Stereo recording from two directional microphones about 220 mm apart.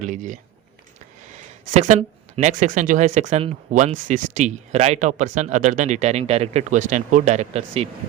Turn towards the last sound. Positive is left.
turn(degrees=-30)  # may be behind; listen again after turning